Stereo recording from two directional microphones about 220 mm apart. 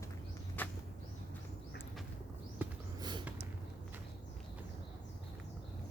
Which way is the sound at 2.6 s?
20° right (ahead or behind).